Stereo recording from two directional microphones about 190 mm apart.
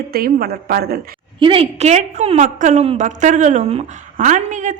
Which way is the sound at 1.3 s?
25° right (ahead or behind).